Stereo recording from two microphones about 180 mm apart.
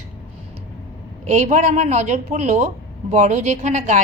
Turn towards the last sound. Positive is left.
turn(degrees=-40)  # may be behind; listen again after turning